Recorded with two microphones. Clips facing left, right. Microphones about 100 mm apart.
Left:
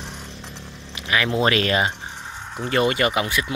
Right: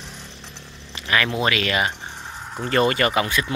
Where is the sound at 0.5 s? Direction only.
10° left (ahead or behind).